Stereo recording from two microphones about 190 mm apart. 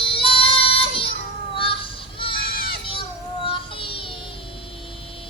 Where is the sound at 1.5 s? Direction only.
30° left (ahead or behind).